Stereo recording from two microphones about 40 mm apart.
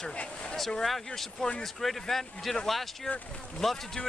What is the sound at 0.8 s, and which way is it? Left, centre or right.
Speech, centre.